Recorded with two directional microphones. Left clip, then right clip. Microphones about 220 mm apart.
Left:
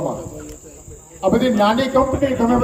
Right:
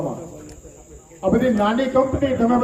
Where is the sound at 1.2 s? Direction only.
25° left (ahead or behind).